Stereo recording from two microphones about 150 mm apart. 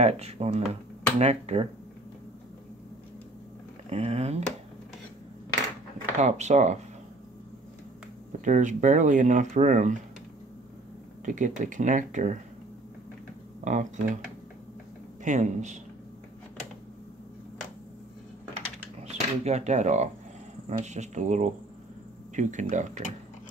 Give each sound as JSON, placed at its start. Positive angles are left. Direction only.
{"t": 0.0, "sound": "speech", "side_deg": -45}
{"t": 3.9, "sound": "speech", "side_deg": -45}
{"t": 6.1, "sound": "speech", "side_deg": -50}
{"t": 8.3, "sound": "speech", "side_deg": -55}
{"t": 11.2, "sound": "speech", "side_deg": -55}
{"t": 13.7, "sound": "speech", "side_deg": -55}
{"t": 15.2, "sound": "speech", "side_deg": -55}
{"t": 19.0, "sound": "speech", "side_deg": -45}